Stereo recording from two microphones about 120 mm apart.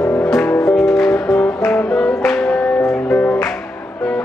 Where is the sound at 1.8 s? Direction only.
5° left (ahead or behind).